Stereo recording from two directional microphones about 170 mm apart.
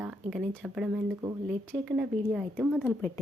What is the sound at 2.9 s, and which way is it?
Speech, 15° left (ahead or behind).